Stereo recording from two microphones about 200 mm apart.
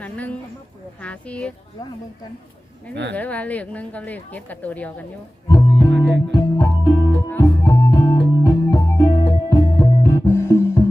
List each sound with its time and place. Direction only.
0.0 s speech: 5° left (ahead or behind)
2.9 s speech: 60° right (ahead or behind)
3.2 s speech: 5° left (ahead or behind)
5.5 s music: 15° left (ahead or behind)